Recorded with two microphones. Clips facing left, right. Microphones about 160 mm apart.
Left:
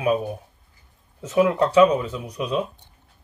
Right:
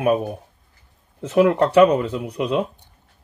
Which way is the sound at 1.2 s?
60° right (ahead or behind).